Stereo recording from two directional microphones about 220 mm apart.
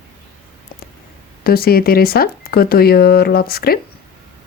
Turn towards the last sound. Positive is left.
turn(degrees=45)  # may be behind; listen again after turning